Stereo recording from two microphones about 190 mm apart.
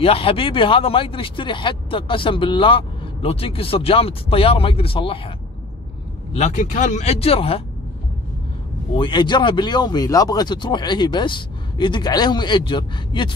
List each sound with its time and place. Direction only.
0.0 s speech: 30° left (ahead or behind)
6.3 s speech: 40° left (ahead or behind)
8.9 s speech: 25° left (ahead or behind)